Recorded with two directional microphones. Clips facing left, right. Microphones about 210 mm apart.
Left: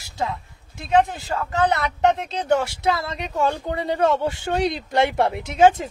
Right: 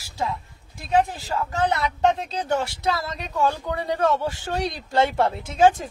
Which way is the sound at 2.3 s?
20° left (ahead or behind).